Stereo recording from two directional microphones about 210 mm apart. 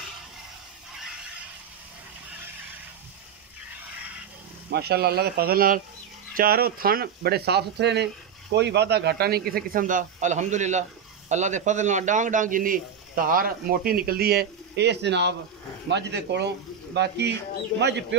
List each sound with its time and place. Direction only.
4.6 s speech: 50° right (ahead or behind)